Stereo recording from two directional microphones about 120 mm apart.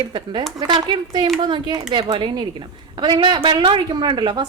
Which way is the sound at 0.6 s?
40° right (ahead or behind).